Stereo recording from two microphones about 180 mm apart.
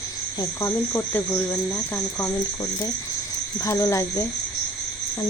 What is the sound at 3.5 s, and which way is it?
Speech, 15° left (ahead or behind).